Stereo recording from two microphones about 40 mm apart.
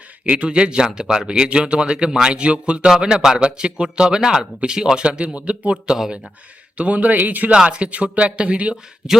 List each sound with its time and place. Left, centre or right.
0.3 s speech: right
3.0 s speech: centre; by 7.5 s right
7.5 s speech: right